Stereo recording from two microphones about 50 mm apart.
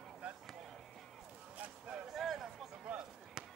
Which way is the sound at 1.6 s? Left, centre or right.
Right.